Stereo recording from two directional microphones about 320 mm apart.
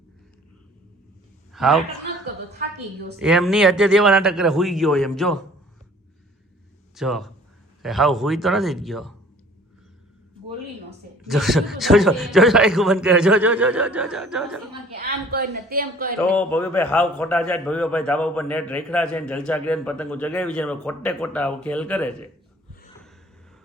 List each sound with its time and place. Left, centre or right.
1.5 s a man's voice: centre
3.2 s a man's voice: centre
6.9 s a man's voice: centre
11.2 s a man's voice: centre
14.9 s a woman's voice: right
16.3 s a man's voice: centre